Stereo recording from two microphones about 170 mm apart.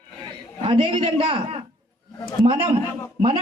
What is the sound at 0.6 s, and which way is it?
Speech, 35° right (ahead or behind).